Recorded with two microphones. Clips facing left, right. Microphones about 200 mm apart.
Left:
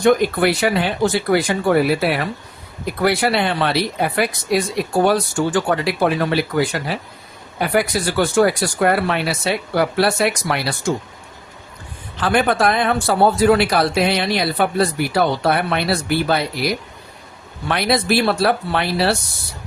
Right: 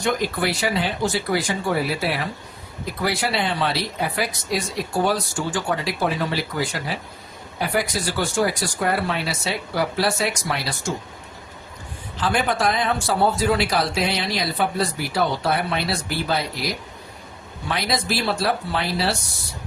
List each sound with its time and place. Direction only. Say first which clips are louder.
0.0 s speech: left 8 dB; 60° left (ahead or behind)
12.2 s speech: left 5 dB; 60° left (ahead or behind)
17.7 s speech: left 6 dB; 60° left (ahead or behind)